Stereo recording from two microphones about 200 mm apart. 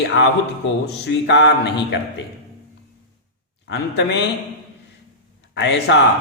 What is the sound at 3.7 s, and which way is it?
Speech, 60° left (ahead or behind).